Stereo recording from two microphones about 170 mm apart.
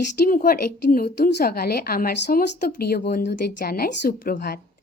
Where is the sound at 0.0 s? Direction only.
50° left (ahead or behind).